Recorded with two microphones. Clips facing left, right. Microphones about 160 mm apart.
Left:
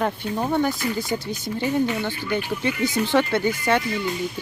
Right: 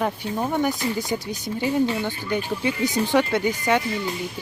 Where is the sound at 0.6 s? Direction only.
20° right (ahead or behind).